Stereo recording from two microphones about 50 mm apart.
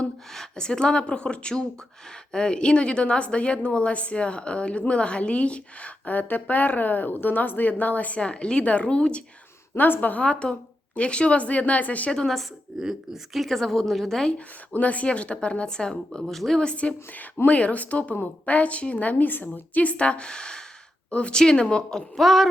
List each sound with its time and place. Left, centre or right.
0.3 s a woman's voice: centre
9.7 s a woman's voice: left
10.9 s a woman's voice: left
12.1 s speech: centre
12.7 s a woman's voice: centre
14.3 s a woman's voice: left; by 16.6 s centre
16.6 s a woman's voice: left
22.1 s a woman's voice: centre